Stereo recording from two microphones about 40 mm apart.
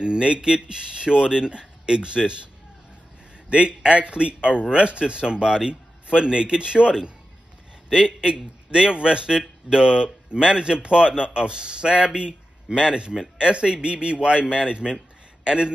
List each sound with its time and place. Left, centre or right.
0.0 s speech: right
3.4 s speech: right